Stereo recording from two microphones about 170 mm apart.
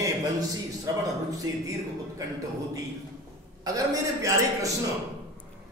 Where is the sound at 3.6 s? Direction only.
20° right (ahead or behind).